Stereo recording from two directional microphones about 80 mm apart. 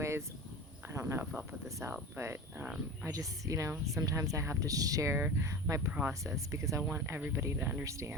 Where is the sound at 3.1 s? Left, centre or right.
Right.